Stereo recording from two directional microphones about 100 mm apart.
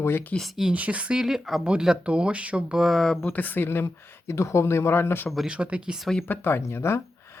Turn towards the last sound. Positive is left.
turn(degrees=25)  # may be behind; listen again after turning